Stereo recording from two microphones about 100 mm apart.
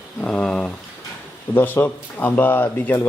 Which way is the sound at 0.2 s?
10° left (ahead or behind).